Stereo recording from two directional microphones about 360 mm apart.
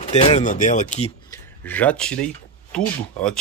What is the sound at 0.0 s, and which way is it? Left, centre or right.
Speech, centre.